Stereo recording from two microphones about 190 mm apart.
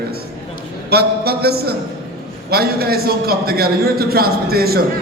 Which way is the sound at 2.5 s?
55° right (ahead or behind).